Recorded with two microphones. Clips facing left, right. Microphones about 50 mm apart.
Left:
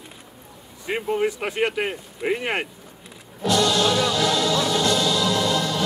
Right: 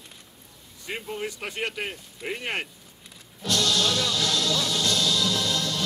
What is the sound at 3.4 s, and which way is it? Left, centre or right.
Music, centre.